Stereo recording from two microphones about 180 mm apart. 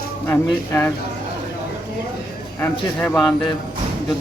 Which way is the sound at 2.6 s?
5° left (ahead or behind).